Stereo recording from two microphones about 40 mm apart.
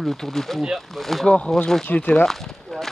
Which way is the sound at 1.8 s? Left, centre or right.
Left.